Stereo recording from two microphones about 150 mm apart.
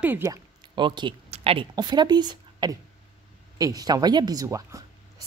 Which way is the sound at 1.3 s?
40° right (ahead or behind).